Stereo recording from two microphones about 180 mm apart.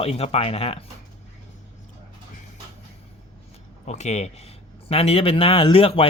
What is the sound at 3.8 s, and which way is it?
Speech, 40° left (ahead or behind).